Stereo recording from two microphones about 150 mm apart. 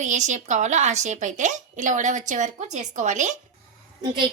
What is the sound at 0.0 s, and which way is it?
A woman's voice, 55° right (ahead or behind).